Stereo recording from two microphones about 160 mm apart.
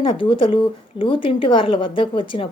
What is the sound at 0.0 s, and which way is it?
Speech, 30° left (ahead or behind).